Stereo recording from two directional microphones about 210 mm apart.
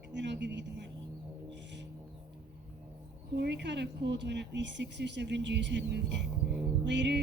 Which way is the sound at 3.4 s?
55° right (ahead or behind).